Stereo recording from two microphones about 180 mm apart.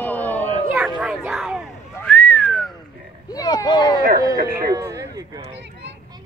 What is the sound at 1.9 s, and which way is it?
Whistling, 5° left (ahead or behind).